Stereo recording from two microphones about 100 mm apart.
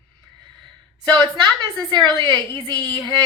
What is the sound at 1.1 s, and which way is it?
A woman's voice, 50° right (ahead or behind).